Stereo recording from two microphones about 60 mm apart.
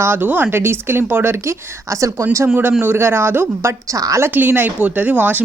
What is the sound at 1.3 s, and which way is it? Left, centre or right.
Speech, right.